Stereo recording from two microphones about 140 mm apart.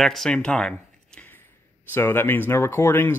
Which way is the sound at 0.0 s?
Centre (ahead or behind).